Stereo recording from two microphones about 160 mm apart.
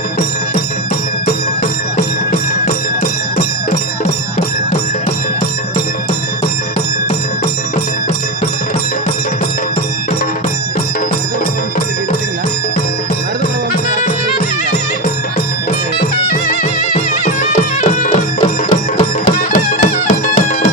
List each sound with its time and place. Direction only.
3.3 s music: 40° left (ahead or behind)
16.0 s music: 70° left (ahead or behind)
16.9 s music: 45° left (ahead or behind)